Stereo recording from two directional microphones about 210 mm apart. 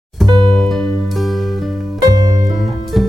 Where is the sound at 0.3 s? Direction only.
20° right (ahead or behind).